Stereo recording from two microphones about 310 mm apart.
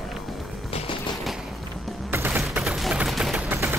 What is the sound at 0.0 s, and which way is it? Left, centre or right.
Music, centre.